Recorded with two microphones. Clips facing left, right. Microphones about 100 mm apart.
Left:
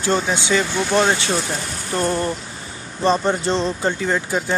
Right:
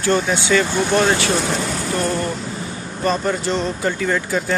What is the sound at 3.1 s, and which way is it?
Speech, 30° left (ahead or behind).